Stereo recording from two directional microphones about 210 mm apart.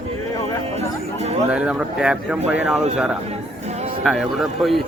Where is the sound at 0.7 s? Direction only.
30° right (ahead or behind).